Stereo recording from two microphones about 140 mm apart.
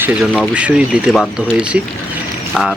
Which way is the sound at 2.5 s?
Centre (ahead or behind).